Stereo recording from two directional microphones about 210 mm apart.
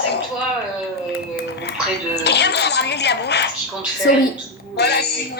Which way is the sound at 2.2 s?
55° left (ahead or behind).